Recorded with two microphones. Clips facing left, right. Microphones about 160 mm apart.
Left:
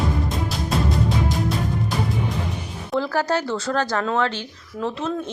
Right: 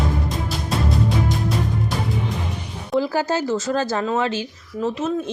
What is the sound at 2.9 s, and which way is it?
Speech, 10° right (ahead or behind).